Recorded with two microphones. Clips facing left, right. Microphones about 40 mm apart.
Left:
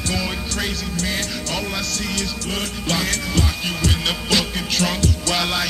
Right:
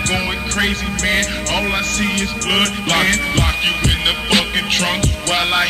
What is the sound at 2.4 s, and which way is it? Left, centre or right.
Music, right.